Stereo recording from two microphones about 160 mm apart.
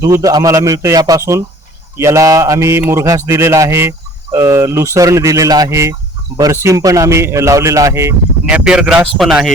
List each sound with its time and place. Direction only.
0.0 s mantra: 20° right (ahead or behind)
8.4 s speech: 5° right (ahead or behind)